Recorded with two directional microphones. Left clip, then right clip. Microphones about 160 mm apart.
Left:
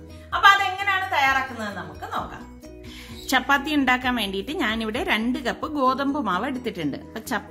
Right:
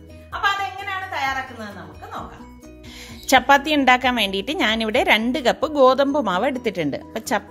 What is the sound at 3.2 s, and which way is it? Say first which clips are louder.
A woman's voice: right 6 dB; 50° right (ahead or behind).